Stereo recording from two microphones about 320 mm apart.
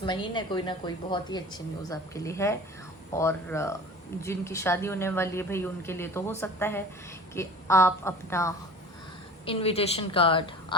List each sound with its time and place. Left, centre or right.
0.0 s a woman's voice: centre